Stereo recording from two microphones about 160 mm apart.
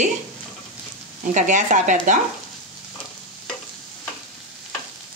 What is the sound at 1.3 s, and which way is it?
Speech, 50° right (ahead or behind).